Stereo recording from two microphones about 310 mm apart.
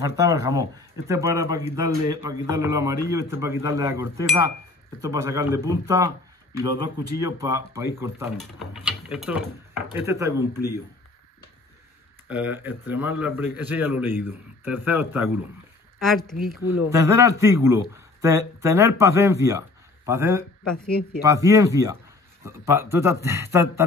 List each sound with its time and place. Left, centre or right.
0.0 s speech: centre
12.3 s speech: centre
16.6 s speech: left
16.9 s speech: centre